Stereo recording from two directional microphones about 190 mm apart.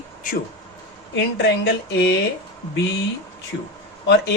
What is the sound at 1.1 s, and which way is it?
Speech, 65° left (ahead or behind).